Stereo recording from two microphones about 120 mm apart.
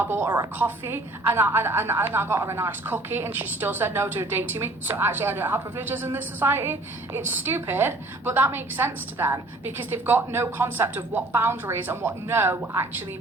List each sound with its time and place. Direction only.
0.0 s a woman's voice: 15° right (ahead or behind)